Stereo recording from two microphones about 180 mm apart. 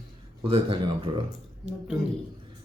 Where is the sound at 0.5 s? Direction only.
30° right (ahead or behind).